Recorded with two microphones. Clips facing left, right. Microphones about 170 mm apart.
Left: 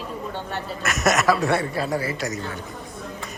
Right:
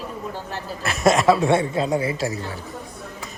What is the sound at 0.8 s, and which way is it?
A man's voice, 30° right (ahead or behind).